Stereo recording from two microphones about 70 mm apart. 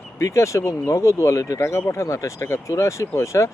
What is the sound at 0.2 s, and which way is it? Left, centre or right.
Speech, left.